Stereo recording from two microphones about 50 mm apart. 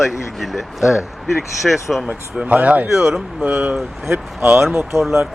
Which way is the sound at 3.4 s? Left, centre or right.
Right.